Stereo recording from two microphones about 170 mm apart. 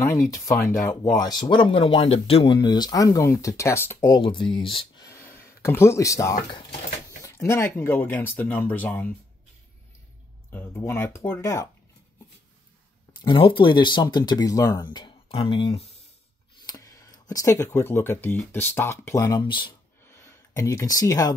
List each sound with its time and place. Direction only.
0.0 s speech: 20° left (ahead or behind)
4.2 s speech: 30° left (ahead or behind); by 9.1 s 10° left (ahead or behind)
10.5 s speech: 15° left (ahead or behind)
13.2 s speech: 30° left (ahead or behind)
16.6 s speech: 20° left (ahead or behind)
20.1 s a sound: 15° left (ahead or behind)